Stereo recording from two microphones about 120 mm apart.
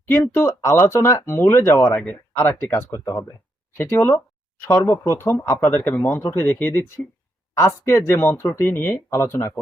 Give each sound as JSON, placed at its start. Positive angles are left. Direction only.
{"t": 0.1, "sound": "speech", "side_deg": 20}